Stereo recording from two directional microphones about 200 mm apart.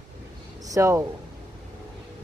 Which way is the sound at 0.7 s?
15° right (ahead or behind).